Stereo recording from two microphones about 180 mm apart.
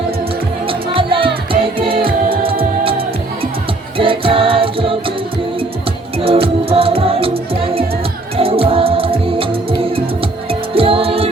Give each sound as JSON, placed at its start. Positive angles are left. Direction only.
{"t": 0.7, "sound": "music", "side_deg": -30}
{"t": 1.9, "sound": "a capella", "side_deg": -30}
{"t": 3.9, "sound": "music", "side_deg": -30}
{"t": 6.1, "sound": "music", "side_deg": -30}
{"t": 8.4, "sound": "music", "side_deg": -30}